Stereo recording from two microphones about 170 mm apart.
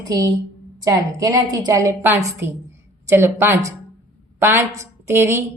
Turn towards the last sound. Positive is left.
turn(degrees=-15)  # may be behind; listen again after turning